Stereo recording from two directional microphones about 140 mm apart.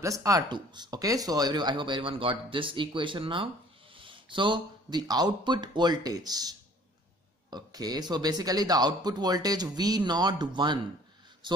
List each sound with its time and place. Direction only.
0.0 s speech: 25° right (ahead or behind)
7.5 s speech: 30° right (ahead or behind)